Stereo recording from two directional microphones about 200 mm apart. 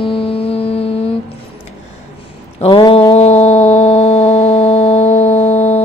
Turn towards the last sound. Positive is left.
turn(degrees=30)  # may be behind; listen again after turning